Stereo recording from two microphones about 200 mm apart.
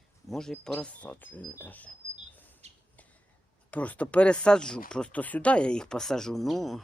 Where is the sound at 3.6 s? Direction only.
5° left (ahead or behind).